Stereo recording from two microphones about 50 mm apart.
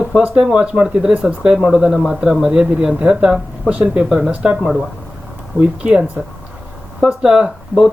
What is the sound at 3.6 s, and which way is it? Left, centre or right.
Speech, right.